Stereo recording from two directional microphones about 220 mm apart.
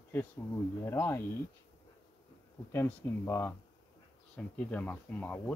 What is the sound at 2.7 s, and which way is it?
Speech, 10° left (ahead or behind).